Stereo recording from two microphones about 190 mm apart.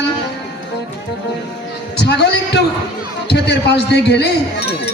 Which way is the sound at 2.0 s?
60° left (ahead or behind).